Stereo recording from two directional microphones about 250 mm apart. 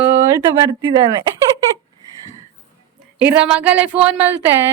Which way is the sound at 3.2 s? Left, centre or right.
Centre.